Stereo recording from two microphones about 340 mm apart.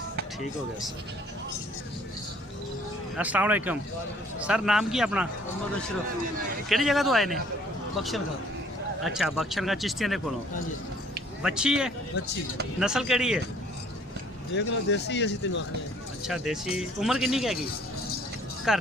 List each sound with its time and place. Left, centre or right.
3.2 s speech: centre
6.7 s speech: centre
11.4 s speech: centre
14.5 s speech: left
16.2 s speech: centre
18.7 s speech: centre